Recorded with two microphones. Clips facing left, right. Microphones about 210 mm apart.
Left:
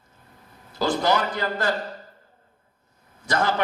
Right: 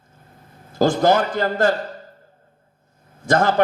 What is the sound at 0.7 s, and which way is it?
A man's voice, 45° right (ahead or behind).